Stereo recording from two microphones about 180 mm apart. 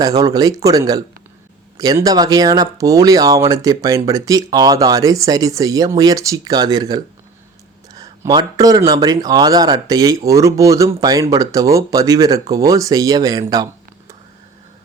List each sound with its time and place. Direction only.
0.0 s speech: 20° right (ahead or behind)